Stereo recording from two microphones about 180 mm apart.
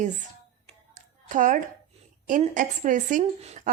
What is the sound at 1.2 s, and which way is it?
A woman's voice, 45° right (ahead or behind).